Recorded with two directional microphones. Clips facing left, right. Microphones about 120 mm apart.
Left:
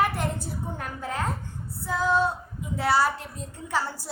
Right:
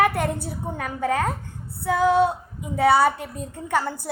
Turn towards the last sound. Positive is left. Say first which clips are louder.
# right 5 dB
turn(degrees=-55)  # may be behind; listen again after turning